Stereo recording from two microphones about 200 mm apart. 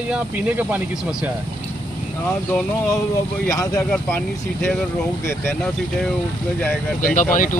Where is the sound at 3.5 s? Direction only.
15° left (ahead or behind).